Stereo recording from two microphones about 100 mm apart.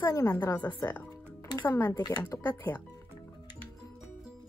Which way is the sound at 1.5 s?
30° left (ahead or behind).